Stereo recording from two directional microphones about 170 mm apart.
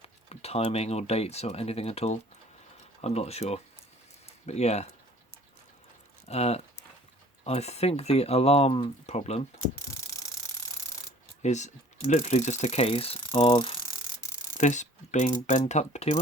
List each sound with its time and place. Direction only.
0.0 s speech: 35° left (ahead or behind)
6.2 s speech: 40° left (ahead or behind)
9.7 s mechanisms: 20° left (ahead or behind)
11.4 s speech: 45° left (ahead or behind)
14.6 s speech: 45° left (ahead or behind)